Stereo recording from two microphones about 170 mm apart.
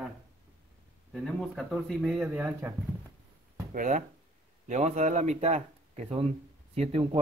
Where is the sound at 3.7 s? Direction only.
50° right (ahead or behind).